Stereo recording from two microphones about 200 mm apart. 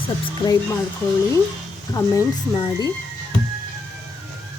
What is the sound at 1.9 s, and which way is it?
Speech, 15° left (ahead or behind).